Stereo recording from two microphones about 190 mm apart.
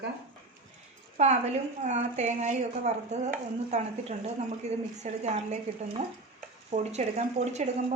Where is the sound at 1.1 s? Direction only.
35° right (ahead or behind).